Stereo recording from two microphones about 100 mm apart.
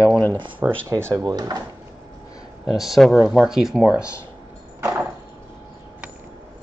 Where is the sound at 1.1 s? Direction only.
40° right (ahead or behind).